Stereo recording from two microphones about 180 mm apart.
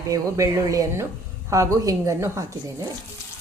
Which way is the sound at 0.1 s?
20° right (ahead or behind).